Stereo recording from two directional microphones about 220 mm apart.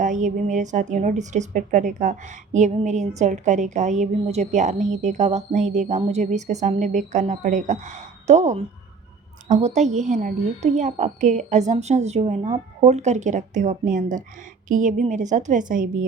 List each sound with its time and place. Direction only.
0.0 s a woman's voice: 35° right (ahead or behind)